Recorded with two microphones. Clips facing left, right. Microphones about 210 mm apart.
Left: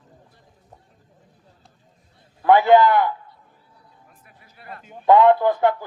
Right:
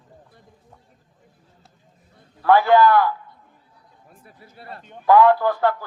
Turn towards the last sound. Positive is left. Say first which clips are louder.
# left 1 dB
turn(degrees=20)  # may be behind; listen again after turning